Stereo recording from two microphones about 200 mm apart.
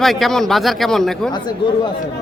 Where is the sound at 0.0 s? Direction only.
Centre (ahead or behind).